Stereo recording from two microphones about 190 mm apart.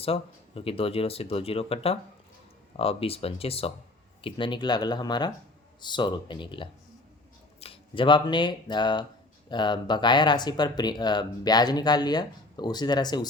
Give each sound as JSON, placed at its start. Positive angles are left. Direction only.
{"t": 0.0, "sound": "speech", "side_deg": 30}